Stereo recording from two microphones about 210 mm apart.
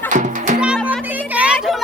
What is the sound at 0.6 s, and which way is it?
Music, 5° right (ahead or behind).